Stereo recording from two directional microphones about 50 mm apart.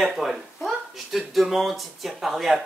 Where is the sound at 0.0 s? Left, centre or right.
Centre.